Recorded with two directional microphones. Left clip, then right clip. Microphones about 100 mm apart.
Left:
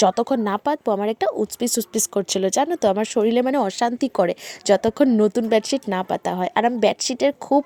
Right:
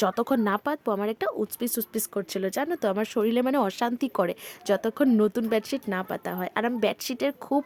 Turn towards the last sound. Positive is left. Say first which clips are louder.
# left 8 dB
turn(degrees=30)  # may be behind; listen again after turning